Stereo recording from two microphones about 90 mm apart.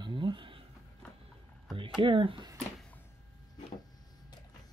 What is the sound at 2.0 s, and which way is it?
Speech, 75° right (ahead or behind).